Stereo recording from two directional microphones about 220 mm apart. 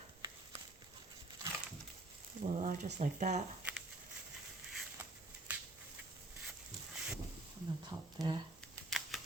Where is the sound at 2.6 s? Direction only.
30° right (ahead or behind).